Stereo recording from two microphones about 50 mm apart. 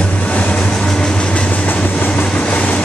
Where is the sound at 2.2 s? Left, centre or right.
Left.